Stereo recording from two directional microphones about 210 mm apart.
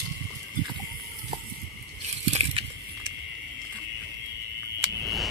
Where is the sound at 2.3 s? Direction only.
30° right (ahead or behind).